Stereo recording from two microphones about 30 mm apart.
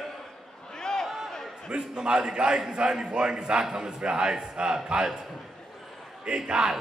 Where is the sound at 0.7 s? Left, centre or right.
Centre.